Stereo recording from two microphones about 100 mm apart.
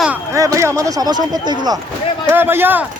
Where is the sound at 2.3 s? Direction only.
20° right (ahead or behind).